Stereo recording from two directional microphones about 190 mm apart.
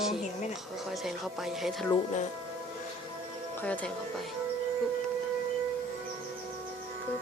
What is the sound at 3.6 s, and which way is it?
Speech, 5° left (ahead or behind).